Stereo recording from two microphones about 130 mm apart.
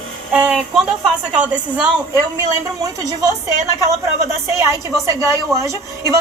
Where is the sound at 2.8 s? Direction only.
25° right (ahead or behind).